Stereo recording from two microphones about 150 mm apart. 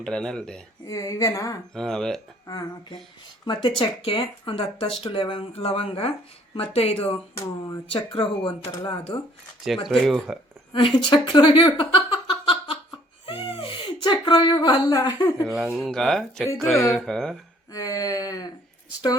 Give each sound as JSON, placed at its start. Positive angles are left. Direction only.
{"t": 0.0, "sound": "speech", "side_deg": 5}
{"t": 0.9, "sound": "speech", "side_deg": 20}
{"t": 1.7, "sound": "speech", "side_deg": 5}
{"t": 3.4, "sound": "speech", "side_deg": 30}
{"t": 7.1, "sound": "speech", "side_deg": 25}
{"t": 9.8, "sound": "speech", "side_deg": 0}
{"t": 10.7, "sound": "a sound", "side_deg": 35}
{"t": 13.6, "sound": "speech", "side_deg": 35}
{"t": 15.4, "sound": "speech", "side_deg": -5}
{"t": 17.7, "sound": "speech", "side_deg": 25}